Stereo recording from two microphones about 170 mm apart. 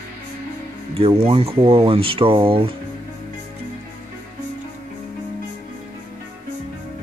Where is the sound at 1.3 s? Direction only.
35° right (ahead or behind).